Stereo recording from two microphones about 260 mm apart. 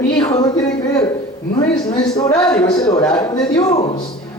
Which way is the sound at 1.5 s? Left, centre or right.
Centre.